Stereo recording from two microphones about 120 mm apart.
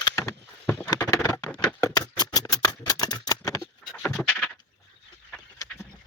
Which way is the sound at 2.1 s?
35° left (ahead or behind).